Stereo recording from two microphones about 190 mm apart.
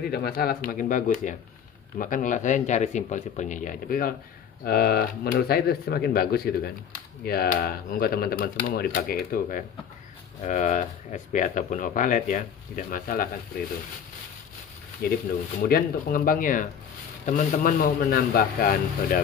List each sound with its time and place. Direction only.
0.1 s speech: 55° left (ahead or behind)
15.0 s speech: 50° left (ahead or behind)